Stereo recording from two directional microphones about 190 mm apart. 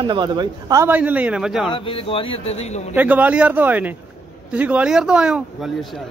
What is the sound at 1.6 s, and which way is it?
Speech, 30° left (ahead or behind).